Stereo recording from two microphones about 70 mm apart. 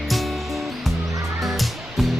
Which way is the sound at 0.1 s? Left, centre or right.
Centre.